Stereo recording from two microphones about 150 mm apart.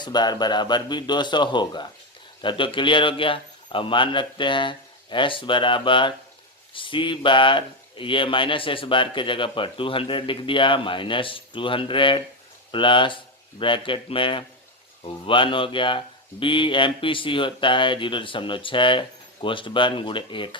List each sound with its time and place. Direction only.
0.0 s speech: 30° left (ahead or behind)